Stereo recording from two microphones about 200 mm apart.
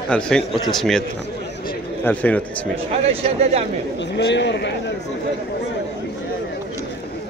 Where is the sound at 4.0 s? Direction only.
60° left (ahead or behind).